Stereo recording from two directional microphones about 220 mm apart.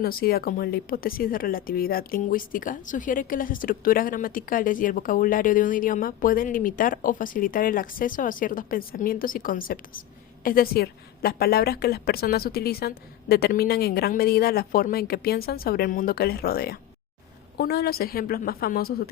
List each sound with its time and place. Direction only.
0.0 s a woman's voice: 40° left (ahead or behind)